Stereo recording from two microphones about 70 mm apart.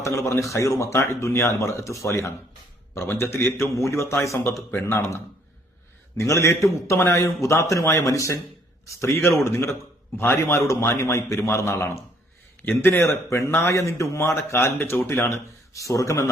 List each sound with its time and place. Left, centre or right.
0.0 s a man's voice: left
15.7 s a man's voice: left